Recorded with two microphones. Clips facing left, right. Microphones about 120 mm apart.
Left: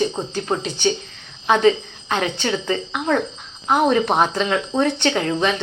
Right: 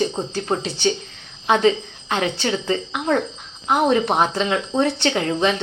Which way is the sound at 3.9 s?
25° right (ahead or behind).